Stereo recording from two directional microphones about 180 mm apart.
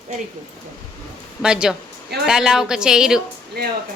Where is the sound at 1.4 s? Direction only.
5° right (ahead or behind).